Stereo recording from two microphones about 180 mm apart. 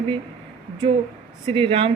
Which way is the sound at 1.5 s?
30° right (ahead or behind).